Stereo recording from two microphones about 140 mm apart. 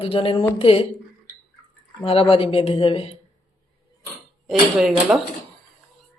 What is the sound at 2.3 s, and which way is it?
Speech, 40° left (ahead or behind).